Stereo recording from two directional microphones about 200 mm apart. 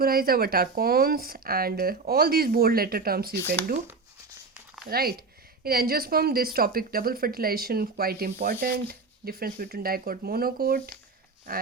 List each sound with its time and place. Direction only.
0.0 s a woman's voice: 45° right (ahead or behind)
4.9 s a woman's voice: 50° right (ahead or behind)